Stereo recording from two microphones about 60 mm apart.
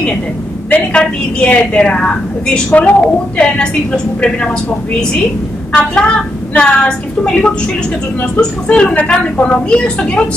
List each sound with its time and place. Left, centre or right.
0.9 s a woman's voice: centre
5.7 s a woman's voice: centre